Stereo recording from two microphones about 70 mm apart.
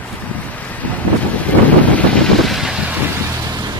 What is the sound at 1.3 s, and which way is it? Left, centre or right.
Wind noise, left.